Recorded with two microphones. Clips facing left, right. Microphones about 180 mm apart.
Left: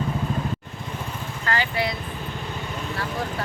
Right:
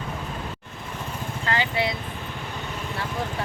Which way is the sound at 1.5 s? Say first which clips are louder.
Even; 20° right (ahead or behind).